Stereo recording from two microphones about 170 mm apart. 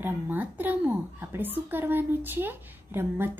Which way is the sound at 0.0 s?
10° right (ahead or behind).